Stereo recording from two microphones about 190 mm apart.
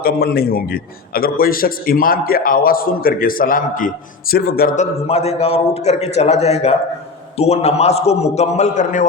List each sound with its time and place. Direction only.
0.0 s a man's voice: 50° left (ahead or behind)
4.8 s a man's voice: 35° left (ahead or behind)